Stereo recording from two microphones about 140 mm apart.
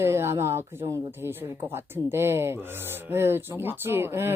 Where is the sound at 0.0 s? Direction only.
15° right (ahead or behind).